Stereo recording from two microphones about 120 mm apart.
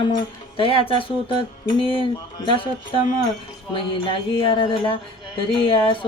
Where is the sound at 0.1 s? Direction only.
45° left (ahead or behind).